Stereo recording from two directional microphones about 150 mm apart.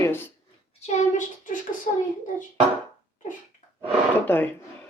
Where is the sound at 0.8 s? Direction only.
50° left (ahead or behind).